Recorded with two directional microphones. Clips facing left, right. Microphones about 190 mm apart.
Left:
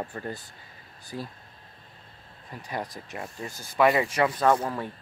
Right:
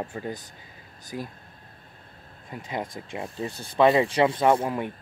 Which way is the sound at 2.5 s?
20° right (ahead or behind).